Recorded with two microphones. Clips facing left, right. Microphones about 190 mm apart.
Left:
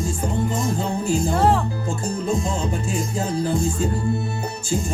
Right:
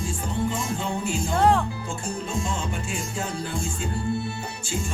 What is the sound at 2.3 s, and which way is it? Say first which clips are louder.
Music: left 7 dB; 35° left (ahead or behind).